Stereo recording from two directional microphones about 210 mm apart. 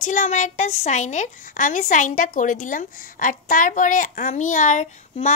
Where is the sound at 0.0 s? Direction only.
35° left (ahead or behind).